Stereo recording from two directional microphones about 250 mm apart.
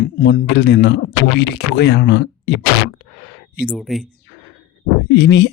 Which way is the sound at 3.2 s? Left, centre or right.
Left.